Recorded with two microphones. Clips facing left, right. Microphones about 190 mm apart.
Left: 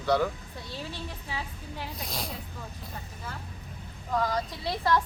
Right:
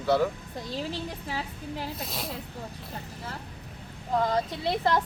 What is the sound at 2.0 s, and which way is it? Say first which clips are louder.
Speech: right 1 dB; 5° right (ahead or behind).